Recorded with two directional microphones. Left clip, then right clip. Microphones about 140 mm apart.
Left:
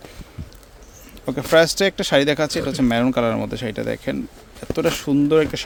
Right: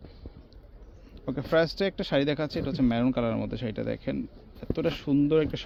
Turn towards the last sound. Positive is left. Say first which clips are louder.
# left 7 dB
turn(degrees=35)  # may be behind; listen again after turning